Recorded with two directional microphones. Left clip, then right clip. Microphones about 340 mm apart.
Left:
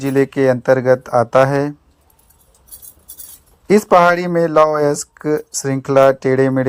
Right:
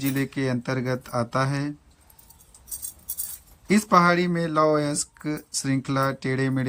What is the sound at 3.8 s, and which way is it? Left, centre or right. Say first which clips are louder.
Speech: left 6 dB; left.